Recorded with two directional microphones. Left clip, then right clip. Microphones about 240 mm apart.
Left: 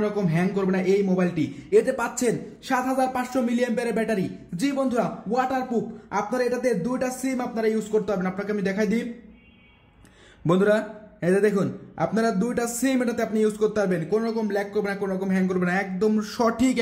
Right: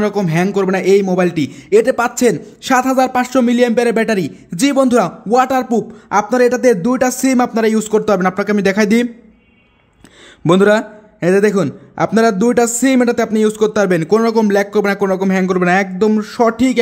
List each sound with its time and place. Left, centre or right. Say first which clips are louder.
0.0 s a man's voice: right 9 dB; right
10.4 s a man's voice: right 10 dB; right